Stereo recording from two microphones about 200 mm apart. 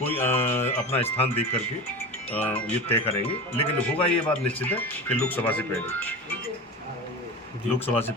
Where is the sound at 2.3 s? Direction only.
10° left (ahead or behind).